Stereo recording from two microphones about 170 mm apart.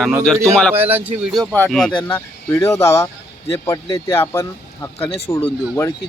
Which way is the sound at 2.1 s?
15° left (ahead or behind).